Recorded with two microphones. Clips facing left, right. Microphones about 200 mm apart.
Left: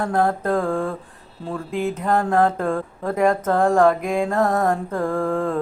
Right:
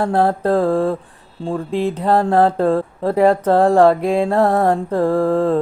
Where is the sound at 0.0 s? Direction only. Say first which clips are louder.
Right 4 dB; 30° right (ahead or behind).